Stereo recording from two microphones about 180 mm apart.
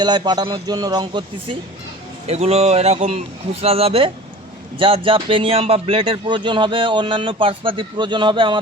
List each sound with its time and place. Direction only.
0.0 s a man's voice: 25° right (ahead or behind)
2.2 s a man's voice: 35° right (ahead or behind)